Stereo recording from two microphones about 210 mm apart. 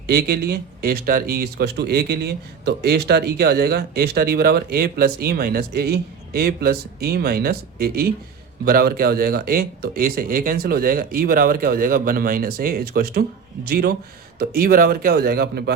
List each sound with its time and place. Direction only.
0.1 s speech: 50° right (ahead or behind)